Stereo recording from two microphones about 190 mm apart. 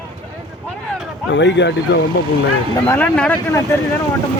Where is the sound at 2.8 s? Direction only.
10° left (ahead or behind).